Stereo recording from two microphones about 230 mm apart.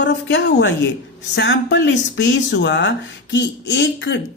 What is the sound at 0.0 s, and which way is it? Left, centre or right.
A woman's voice, left.